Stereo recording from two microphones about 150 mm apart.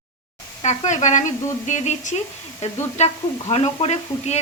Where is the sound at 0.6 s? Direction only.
55° left (ahead or behind).